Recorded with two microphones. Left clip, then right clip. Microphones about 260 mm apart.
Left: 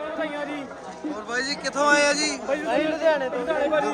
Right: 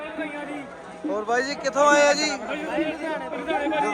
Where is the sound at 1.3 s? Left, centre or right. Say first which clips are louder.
Right 2 dB; centre.